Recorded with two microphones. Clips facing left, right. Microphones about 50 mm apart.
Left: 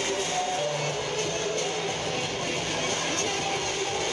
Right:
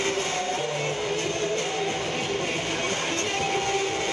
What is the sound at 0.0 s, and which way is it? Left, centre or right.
Music, right.